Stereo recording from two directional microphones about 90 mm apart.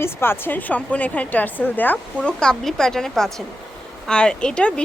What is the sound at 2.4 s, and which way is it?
A woman's voice, 5° left (ahead or behind).